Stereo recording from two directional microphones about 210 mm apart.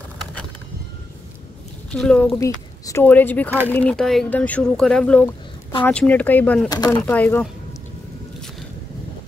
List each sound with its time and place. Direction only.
2.0 s speech: 5° left (ahead or behind)
6.7 s speech: 20° left (ahead or behind)